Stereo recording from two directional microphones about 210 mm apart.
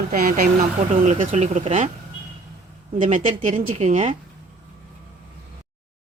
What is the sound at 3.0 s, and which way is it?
Speech, 35° right (ahead or behind).